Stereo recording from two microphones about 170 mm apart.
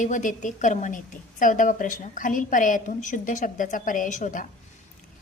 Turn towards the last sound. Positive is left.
turn(degrees=50)  # may be behind; listen again after turning